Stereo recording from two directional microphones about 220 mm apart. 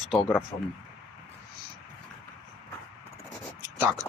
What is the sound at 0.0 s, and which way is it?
Speech, centre (ahead or behind).